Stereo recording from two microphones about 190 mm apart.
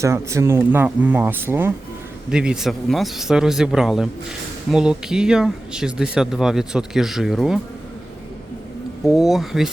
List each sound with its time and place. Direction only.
0.0 s speech: 15° right (ahead or behind)
9.0 s speech: centre (ahead or behind)